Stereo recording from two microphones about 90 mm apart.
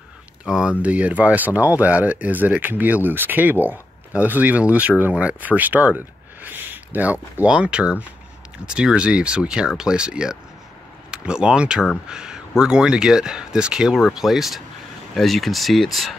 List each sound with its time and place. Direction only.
0.5 s speech: 10° right (ahead or behind)